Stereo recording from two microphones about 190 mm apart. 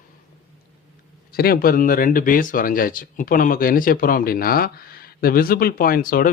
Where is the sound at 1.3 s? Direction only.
55° left (ahead or behind).